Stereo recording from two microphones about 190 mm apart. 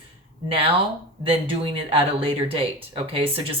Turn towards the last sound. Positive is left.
turn(degrees=-30)  # may be behind; listen again after turning